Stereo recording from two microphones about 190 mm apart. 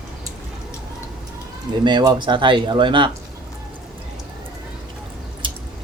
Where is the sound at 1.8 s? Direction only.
20° right (ahead or behind).